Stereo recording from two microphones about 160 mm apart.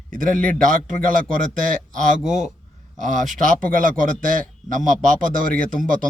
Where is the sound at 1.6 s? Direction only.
55° right (ahead or behind).